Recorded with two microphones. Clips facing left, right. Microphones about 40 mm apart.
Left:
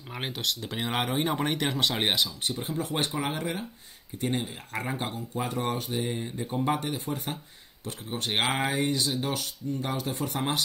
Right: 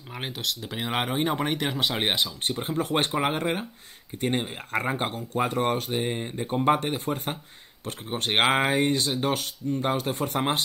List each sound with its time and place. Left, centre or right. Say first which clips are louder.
0.1 s speech: even; centre
2.8 s speech: right 6 dB; right
5.9 s speech: right 3 dB; right
8.4 s speech: right 5 dB; right